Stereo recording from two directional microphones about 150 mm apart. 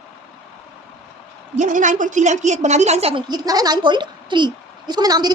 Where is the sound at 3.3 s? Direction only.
25° right (ahead or behind).